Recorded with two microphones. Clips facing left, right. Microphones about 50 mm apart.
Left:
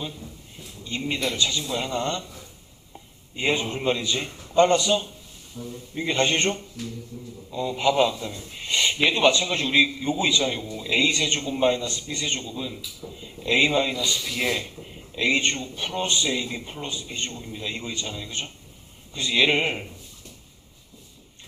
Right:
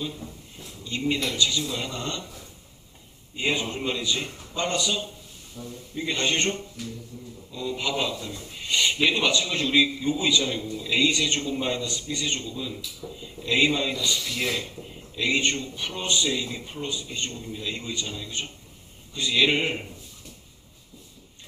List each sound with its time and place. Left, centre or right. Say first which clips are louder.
0.9 s a man's voice: even; left
3.3 s a man's voice: left 2 dB; left
5.6 s speech: left 3 dB; centre
6.0 s a man's voice: left 3 dB; left
7.1 s a man's voice: left 2 dB; centre
7.5 s a man's voice: left 6 dB; left
13.0 s speech: right 1 dB; centre
13.4 s a man's voice: left 1 dB; left
13.9 s a man's voice: left 1 dB; centre
15.1 s a man's voice: left 2 dB; left
19.1 s a man's voice: left 1 dB; left